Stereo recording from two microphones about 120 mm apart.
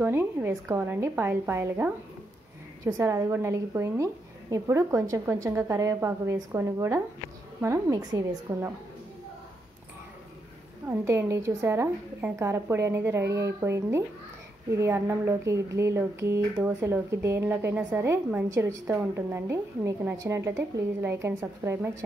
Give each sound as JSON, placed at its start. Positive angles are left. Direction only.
{"t": 0.0, "sound": "speech", "side_deg": -20}
{"t": 10.9, "sound": "speech", "side_deg": -20}